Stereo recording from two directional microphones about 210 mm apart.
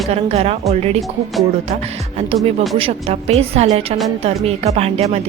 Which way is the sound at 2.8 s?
25° right (ahead or behind).